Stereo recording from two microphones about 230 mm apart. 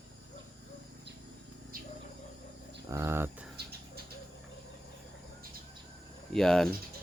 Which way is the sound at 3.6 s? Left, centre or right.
Right.